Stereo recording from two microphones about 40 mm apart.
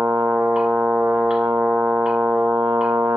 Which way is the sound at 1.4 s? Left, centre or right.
Right.